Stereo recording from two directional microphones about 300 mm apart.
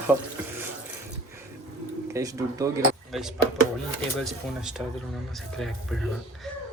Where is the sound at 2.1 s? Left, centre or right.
Centre.